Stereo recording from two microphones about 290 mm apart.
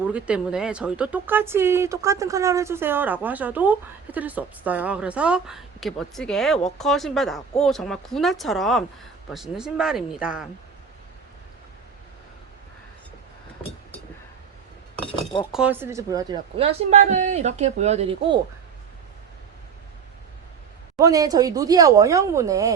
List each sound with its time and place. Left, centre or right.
0.1 s speech: centre
15.0 s speech: centre
15.5 s a woman's voice: centre
20.9 s speech: centre